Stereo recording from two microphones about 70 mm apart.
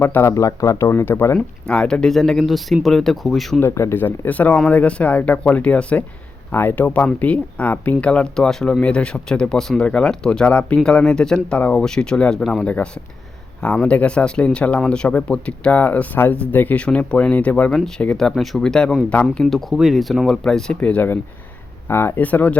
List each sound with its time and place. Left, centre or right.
0.0 s speech: left
0.3 s speech: left
0.9 s speech: left
1.6 s speech: centre
3.6 s speech: left; by 19.5 s centre
19.7 s speech: centre
20.2 s speech: centre
21.8 s speech: left